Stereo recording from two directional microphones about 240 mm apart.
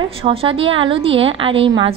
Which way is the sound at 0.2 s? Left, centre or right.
Right.